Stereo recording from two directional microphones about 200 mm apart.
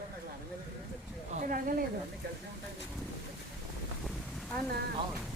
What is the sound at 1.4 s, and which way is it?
Speech, 45° right (ahead or behind).